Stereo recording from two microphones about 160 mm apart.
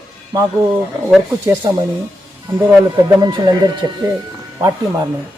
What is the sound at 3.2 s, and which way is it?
Speech, 25° right (ahead or behind).